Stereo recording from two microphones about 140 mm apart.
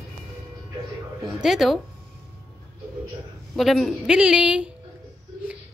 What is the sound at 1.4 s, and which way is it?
Speech, centre (ahead or behind).